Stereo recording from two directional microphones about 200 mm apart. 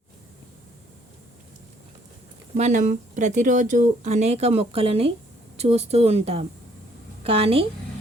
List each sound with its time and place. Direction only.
2.6 s a woman's voice: 35° right (ahead or behind)